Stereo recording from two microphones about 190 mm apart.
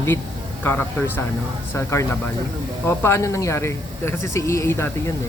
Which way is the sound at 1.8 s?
15° left (ahead or behind).